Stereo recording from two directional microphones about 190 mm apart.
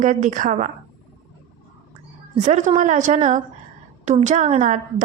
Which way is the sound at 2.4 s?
40° right (ahead or behind).